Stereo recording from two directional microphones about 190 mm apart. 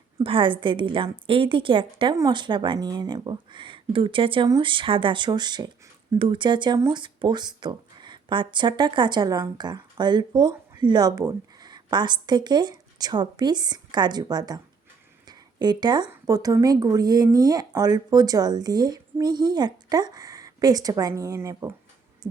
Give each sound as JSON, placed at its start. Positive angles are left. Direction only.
{"t": 0.2, "sound": "speech", "side_deg": -25}